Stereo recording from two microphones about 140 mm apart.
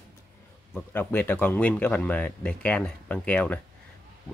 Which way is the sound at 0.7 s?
10° left (ahead or behind).